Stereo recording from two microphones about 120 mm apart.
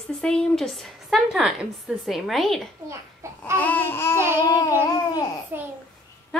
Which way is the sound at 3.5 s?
15° left (ahead or behind).